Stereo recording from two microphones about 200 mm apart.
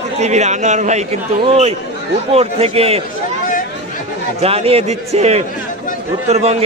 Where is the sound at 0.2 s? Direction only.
35° right (ahead or behind).